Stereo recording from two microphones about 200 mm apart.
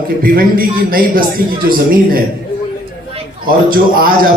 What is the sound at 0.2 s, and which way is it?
A man's voice, 45° right (ahead or behind).